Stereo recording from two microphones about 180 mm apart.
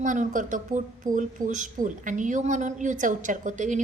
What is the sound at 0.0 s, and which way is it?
Speech, 45° right (ahead or behind).